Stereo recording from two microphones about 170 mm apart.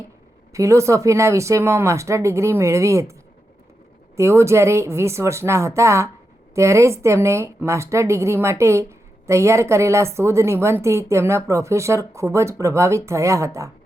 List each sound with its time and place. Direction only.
0.5 s a woman's voice: 20° right (ahead or behind)
4.2 s a woman's voice: 15° right (ahead or behind)